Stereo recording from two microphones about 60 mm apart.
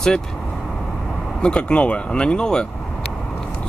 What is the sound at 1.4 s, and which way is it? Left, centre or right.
Speech, centre.